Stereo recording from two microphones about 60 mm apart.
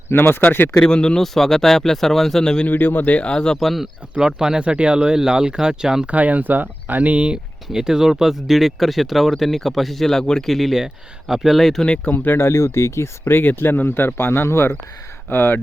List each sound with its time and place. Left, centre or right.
0.1 s speech: left
0.8 s speech: centre
2.6 s speech: left; by 3.6 s centre
3.6 s speech: centre
4.1 s speech: centre
6.1 s speech: right; by 11.8 s centre
11.8 s speech: centre
12.1 s speech: left